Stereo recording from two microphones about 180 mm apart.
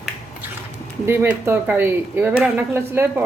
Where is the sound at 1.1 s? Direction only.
15° right (ahead or behind).